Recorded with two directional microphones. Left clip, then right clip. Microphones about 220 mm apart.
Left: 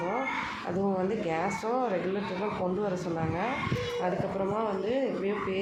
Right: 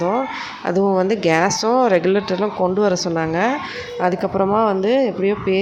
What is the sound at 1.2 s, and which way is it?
Speech, 50° right (ahead or behind).